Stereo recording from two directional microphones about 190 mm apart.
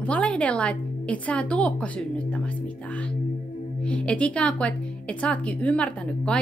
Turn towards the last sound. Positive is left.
turn(degrees=5)  # may be behind; listen again after turning